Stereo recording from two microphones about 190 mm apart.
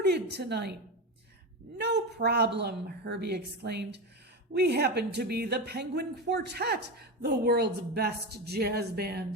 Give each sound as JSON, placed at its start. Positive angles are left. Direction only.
{"t": 0.0, "sound": "a woman's voice", "side_deg": -60}
{"t": 1.8, "sound": "a woman's voice", "side_deg": -60}